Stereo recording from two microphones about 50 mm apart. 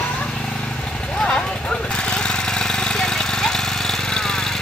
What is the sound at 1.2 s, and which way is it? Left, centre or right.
Vehicle, centre.